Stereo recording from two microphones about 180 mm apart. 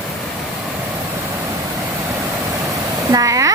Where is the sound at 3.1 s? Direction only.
20° right (ahead or behind).